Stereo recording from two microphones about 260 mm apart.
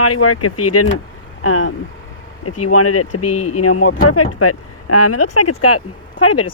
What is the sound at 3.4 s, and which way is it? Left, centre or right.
Speech, left.